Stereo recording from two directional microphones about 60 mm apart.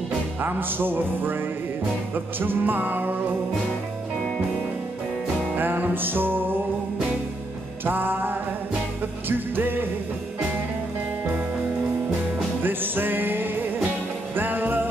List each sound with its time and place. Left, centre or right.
0.4 s music: right
5.6 s music: right
7.8 s music: right
12.6 s music: right